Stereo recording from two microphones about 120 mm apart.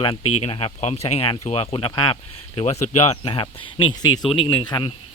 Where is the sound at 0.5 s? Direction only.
60° left (ahead or behind); by 2.1 s 45° left (ahead or behind).